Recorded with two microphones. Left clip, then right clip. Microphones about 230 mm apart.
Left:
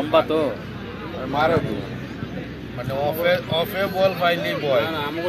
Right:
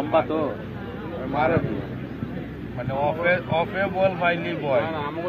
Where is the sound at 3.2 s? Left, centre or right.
Left.